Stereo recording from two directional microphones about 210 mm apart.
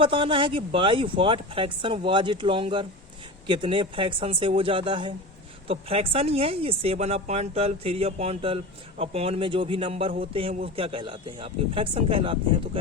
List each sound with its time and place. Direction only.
0.0 s speech: 25° right (ahead or behind)